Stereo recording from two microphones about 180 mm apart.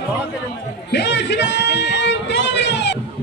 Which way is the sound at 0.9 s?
70° left (ahead or behind).